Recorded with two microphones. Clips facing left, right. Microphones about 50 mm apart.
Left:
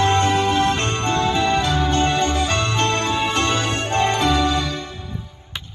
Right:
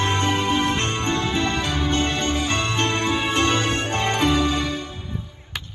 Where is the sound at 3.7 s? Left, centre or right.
Left.